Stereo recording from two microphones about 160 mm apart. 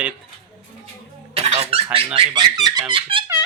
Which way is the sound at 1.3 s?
45° right (ahead or behind).